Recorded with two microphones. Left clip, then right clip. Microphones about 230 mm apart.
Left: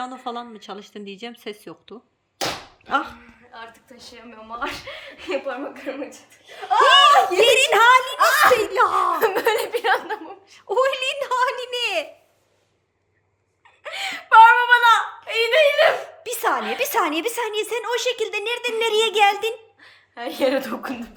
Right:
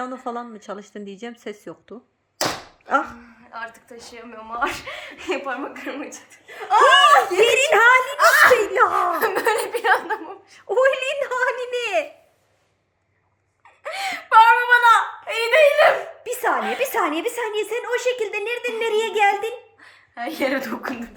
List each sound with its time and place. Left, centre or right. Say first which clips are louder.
0.3 s speech: right 2 dB; centre
13.8 s wail: right 2 dB; centre
17.0 s a woman's voice: even; centre